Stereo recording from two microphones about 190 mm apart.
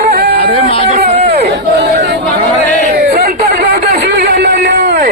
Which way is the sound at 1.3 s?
55° right (ahead or behind).